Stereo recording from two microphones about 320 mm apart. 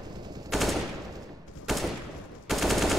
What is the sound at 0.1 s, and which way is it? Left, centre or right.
Machine gun, centre.